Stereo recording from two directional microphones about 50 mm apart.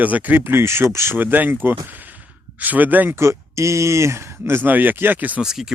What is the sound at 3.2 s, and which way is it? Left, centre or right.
Speech, right.